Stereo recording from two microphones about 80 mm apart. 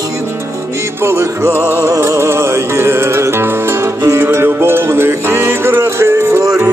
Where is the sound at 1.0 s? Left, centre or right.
Right.